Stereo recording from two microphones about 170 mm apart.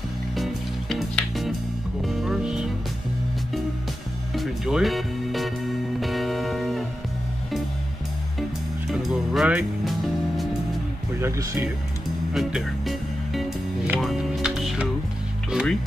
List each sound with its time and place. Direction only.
0.4 s music: centre (ahead or behind)
4.3 s music: centre (ahead or behind)
8.4 s music: centre (ahead or behind)
11.1 s speech: 15° right (ahead or behind)
12.4 s music: centre (ahead or behind)